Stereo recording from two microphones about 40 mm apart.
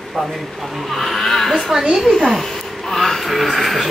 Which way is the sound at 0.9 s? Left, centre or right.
Centre.